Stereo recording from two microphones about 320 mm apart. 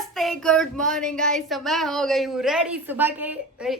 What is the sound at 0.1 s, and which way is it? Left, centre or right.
Speech, centre.